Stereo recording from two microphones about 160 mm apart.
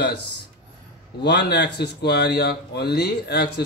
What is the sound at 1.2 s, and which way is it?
Speech, 90° left.